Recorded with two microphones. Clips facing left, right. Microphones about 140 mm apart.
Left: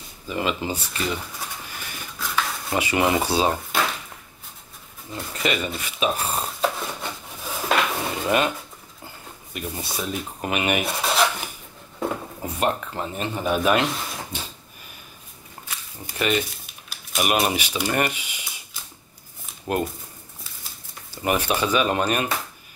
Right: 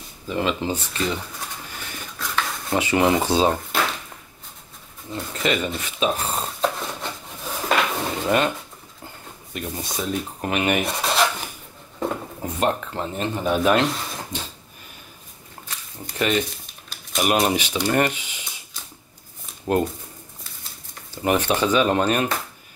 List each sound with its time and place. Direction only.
0.3 s speech: 10° left (ahead or behind)
2.8 s speech: 10° left (ahead or behind)
3.3 s wood: 5° left (ahead or behind)
5.1 s speech: 10° left (ahead or behind)
6.0 s dishes: 5° left (ahead or behind)
9.5 s rub: 10° left (ahead or behind)
12.0 s a sound: centre (ahead or behind)
12.4 s speech: 10° left (ahead or behind)
16.9 s typewriter: 5° left (ahead or behind)
19.7 s speech: 10° left (ahead or behind)
21.3 s speech: 10° left (ahead or behind)